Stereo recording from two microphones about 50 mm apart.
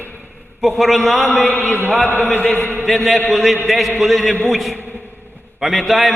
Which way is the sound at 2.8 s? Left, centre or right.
Centre.